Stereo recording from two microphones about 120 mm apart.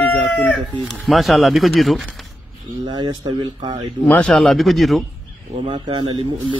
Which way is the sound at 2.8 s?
35° right (ahead or behind).